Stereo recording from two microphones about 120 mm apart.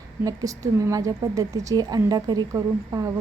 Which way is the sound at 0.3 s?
30° right (ahead or behind).